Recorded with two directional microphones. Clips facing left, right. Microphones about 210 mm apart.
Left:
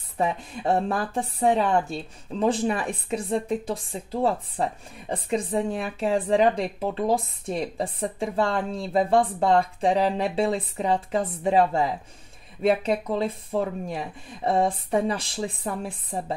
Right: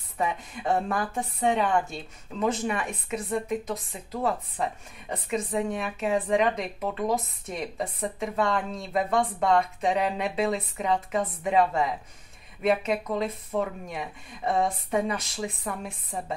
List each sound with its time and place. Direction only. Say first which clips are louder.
0.2 s a woman's voice: left 3 dB; 30° left (ahead or behind)